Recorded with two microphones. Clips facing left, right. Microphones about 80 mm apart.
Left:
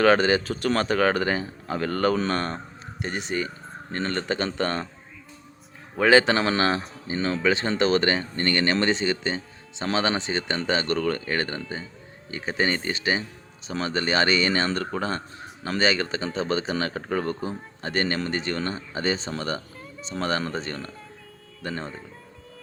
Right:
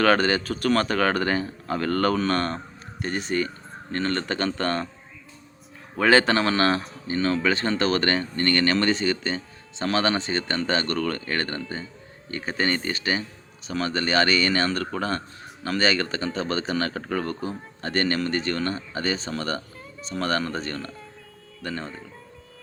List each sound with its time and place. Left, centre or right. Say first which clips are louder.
0.0 s speech: left 1 dB; centre
6.0 s speech: left 1 dB; centre